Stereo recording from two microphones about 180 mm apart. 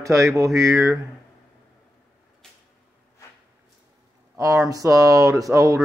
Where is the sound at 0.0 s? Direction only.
15° right (ahead or behind).